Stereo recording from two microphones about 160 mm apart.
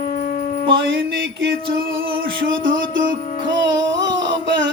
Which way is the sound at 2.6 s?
60° right (ahead or behind).